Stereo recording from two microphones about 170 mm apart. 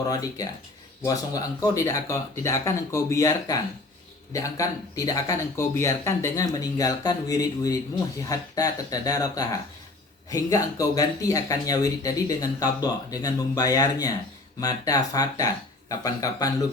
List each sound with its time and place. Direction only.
0.1 s speech: 20° left (ahead or behind)